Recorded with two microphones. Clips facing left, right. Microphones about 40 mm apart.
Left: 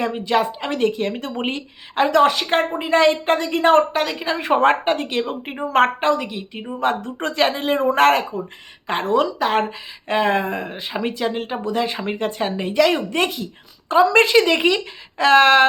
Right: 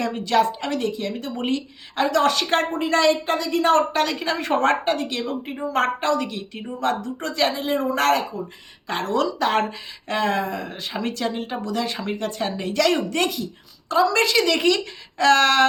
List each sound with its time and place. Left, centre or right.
0.0 s speech: centre
0.7 s a woman's voice: left
2.2 s speech: centre
3.2 s a woman's voice: left
3.9 s speech: centre; by 5.9 s left
6.0 s speech: left
7.2 s a woman's voice: left
8.9 s speech: left
9.4 s speech: centre
10.1 s speech: left